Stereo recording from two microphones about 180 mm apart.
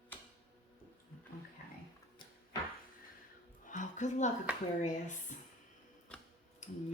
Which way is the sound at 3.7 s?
45° left (ahead or behind).